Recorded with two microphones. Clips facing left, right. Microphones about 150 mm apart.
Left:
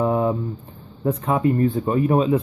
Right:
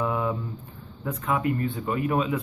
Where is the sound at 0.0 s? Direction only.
35° left (ahead or behind).